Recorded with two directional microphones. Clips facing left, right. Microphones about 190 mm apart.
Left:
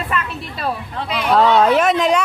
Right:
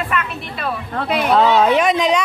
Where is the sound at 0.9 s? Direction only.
50° right (ahead or behind).